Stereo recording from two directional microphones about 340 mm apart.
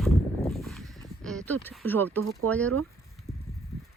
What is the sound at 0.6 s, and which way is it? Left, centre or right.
Clip-clop, centre.